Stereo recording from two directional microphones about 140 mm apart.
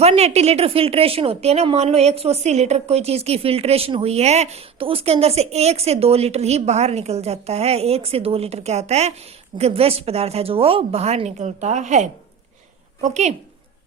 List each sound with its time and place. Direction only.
0.0 s a woman's voice: 45° right (ahead or behind)